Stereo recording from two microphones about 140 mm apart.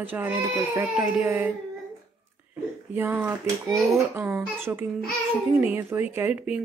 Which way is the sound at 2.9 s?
15° right (ahead or behind).